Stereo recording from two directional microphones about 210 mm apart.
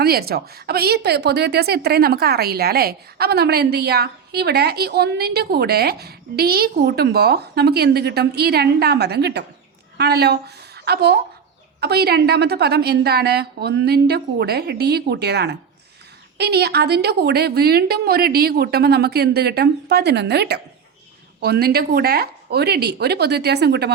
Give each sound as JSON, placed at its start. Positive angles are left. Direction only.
{"t": 0.0, "sound": "a woman's voice", "side_deg": -45}